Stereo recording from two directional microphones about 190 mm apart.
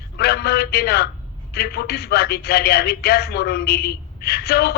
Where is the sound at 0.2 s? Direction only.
55° left (ahead or behind).